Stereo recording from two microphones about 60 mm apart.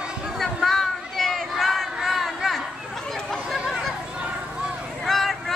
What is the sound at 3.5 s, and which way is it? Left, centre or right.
Chatter, centre.